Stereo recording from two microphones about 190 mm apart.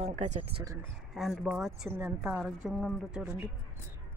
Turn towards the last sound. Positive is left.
turn(degrees=-10)  # may be behind; listen again after turning